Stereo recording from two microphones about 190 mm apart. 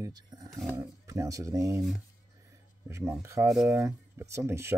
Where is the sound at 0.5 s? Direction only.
5° right (ahead or behind).